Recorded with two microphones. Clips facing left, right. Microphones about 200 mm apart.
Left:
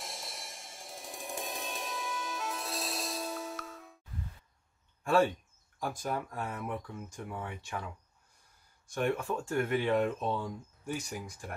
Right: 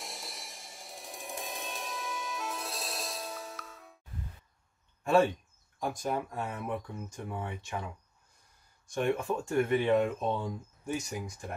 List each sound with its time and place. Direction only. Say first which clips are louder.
0.0 s music: even; centre (ahead or behind)
5.8 s speech: right 2 dB; 20° right (ahead or behind)
8.9 s speech: right 2 dB; 20° right (ahead or behind)